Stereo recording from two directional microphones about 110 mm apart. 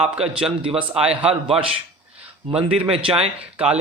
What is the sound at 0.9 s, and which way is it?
Speech, 65° right (ahead or behind).